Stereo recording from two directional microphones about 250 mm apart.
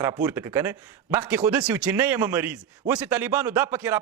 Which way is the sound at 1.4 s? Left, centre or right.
Centre.